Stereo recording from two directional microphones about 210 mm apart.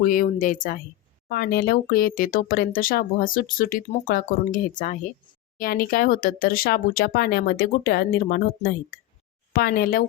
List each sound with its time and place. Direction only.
0.0 s speech: 40° left (ahead or behind)